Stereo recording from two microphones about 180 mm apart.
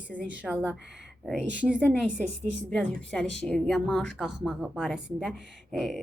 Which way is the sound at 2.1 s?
5° left (ahead or behind).